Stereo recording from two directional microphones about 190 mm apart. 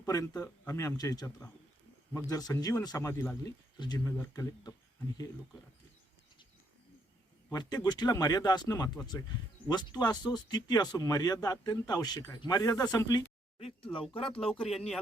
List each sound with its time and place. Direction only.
0.0 s speech: 15° left (ahead or behind)
7.5 s speech: 20° left (ahead or behind)
14.3 s speech: 5° left (ahead or behind)